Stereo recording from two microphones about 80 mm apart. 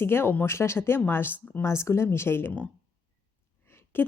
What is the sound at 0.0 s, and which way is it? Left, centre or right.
Speech, left.